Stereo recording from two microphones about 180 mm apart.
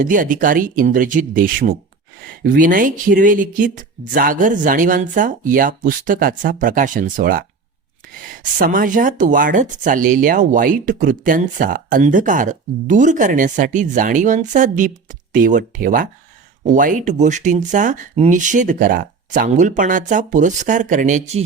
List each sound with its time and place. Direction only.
0.0 s speech: 50° right (ahead or behind)